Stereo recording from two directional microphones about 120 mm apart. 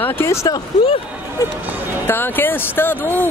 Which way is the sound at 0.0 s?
20° left (ahead or behind).